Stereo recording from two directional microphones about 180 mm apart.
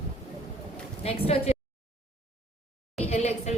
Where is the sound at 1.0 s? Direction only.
35° left (ahead or behind).